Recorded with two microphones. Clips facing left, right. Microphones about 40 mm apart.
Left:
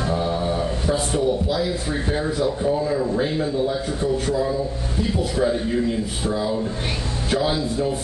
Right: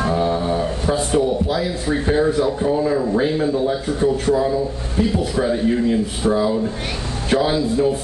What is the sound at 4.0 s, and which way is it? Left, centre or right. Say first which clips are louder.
Speech: right 5 dB; right.